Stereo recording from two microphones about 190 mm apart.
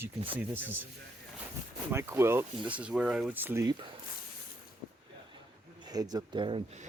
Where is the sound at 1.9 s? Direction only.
15° right (ahead or behind).